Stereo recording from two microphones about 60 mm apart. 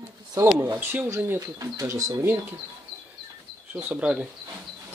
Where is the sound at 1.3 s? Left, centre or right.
Right.